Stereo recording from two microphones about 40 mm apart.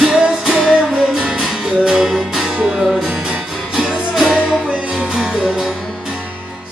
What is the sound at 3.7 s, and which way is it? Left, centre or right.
Music, centre.